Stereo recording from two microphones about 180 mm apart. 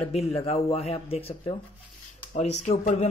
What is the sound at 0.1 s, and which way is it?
Speech, 35° left (ahead or behind).